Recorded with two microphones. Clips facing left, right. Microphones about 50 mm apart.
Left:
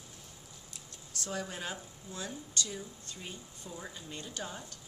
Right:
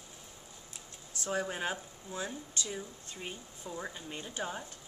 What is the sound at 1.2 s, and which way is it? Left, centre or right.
A woman's voice, right.